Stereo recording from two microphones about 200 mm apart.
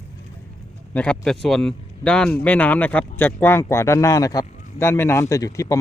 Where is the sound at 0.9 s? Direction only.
5° left (ahead or behind).